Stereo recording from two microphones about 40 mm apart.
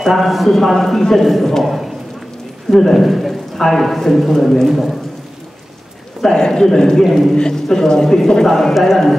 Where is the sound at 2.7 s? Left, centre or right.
Centre.